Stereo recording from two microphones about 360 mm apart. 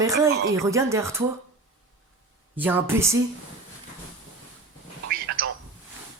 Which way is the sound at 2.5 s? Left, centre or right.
Centre.